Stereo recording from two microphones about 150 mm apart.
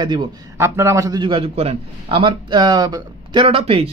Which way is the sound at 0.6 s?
20° right (ahead or behind).